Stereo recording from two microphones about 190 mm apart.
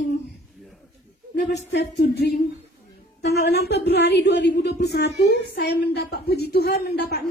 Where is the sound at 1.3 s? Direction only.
60° left (ahead or behind).